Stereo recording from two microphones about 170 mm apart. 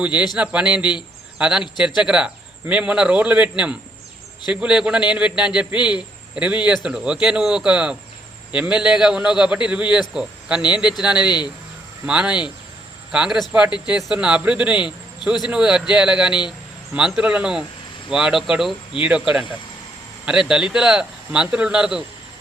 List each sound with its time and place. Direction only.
0.0 s speech: 5° right (ahead or behind)
0.8 s speech: 25° left (ahead or behind)
1.4 s a man's voice: 5° right (ahead or behind)
11.3 s speech: 25° left (ahead or behind)
12.0 s a man's voice: 5° right (ahead or behind)